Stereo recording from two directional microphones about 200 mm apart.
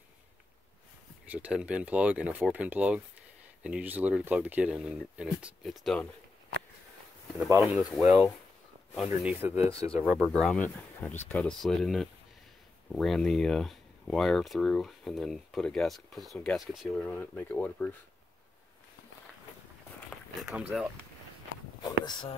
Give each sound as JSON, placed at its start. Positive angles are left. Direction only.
{"t": 1.2, "sound": "speech", "side_deg": -10}
{"t": 7.4, "sound": "speech", "side_deg": -15}
{"t": 7.9, "sound": "speech", "side_deg": 0}
{"t": 10.1, "sound": "speech", "side_deg": 5}
{"t": 20.3, "sound": "speech", "side_deg": -5}
{"t": 22.0, "sound": "speech", "side_deg": 20}